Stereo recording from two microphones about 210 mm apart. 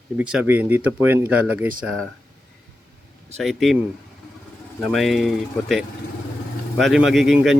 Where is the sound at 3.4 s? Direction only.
Centre (ahead or behind).